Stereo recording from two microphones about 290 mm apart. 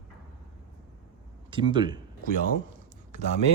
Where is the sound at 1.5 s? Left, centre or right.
Centre.